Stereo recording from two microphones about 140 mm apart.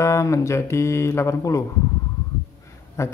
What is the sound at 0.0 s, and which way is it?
Speech, 20° left (ahead or behind).